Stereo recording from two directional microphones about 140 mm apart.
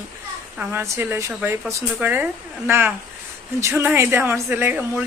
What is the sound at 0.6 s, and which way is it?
Speech, 15° right (ahead or behind).